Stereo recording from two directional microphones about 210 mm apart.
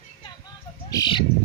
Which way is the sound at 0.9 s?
20° left (ahead or behind).